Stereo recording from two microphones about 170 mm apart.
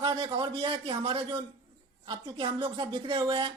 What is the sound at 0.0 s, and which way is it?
Speech, 25° right (ahead or behind).